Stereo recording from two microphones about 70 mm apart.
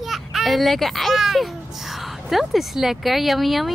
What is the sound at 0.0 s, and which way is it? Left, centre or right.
A child's voice, centre.